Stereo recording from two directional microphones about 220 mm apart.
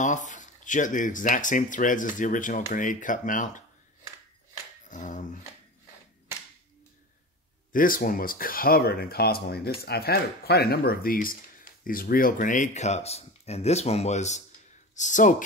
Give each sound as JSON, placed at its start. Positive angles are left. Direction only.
{"t": 0.0, "sound": "speech", "side_deg": 35}
{"t": 4.8, "sound": "a sound", "side_deg": 35}
{"t": 7.7, "sound": "speech", "side_deg": 40}